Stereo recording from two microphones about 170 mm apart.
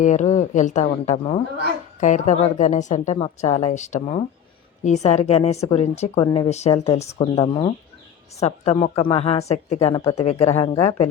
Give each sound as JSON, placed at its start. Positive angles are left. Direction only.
{"t": 0.0, "sound": "speech", "side_deg": 45}
{"t": 2.0, "sound": "speech", "side_deg": 45}
{"t": 6.1, "sound": "speech", "side_deg": 25}
{"t": 6.5, "sound": "speech", "side_deg": 40}